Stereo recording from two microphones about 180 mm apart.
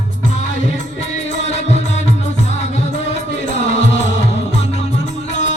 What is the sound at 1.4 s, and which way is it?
Music, 40° left (ahead or behind).